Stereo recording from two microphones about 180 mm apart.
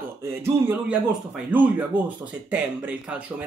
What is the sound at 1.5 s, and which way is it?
Speech, 10° right (ahead or behind).